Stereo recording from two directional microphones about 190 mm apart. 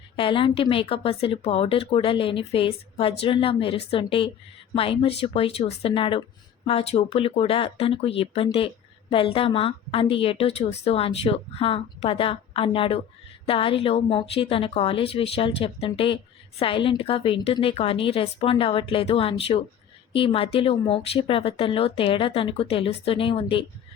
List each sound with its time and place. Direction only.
0.2 s speech: 25° left (ahead or behind)